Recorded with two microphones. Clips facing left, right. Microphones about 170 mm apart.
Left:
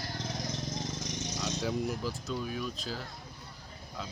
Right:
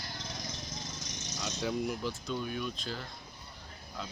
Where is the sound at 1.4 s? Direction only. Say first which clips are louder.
Even; centre (ahead or behind).